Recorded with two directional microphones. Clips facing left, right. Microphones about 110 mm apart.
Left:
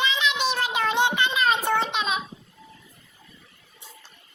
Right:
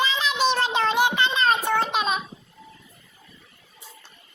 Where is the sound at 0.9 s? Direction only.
20° left (ahead or behind).